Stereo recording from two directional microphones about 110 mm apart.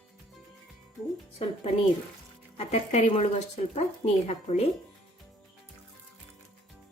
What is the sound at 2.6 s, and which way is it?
Speech, 80° left.